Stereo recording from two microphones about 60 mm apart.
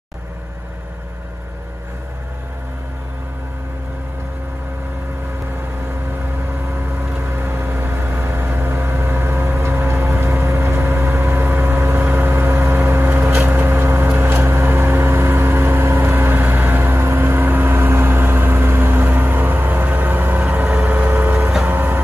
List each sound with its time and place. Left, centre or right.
7.2 s vehicle: right
21.6 s music: right